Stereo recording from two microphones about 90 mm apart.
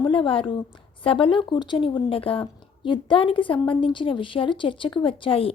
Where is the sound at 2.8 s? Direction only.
65° left (ahead or behind).